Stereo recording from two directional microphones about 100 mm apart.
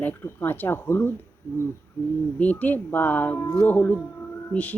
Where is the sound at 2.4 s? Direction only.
15° left (ahead or behind).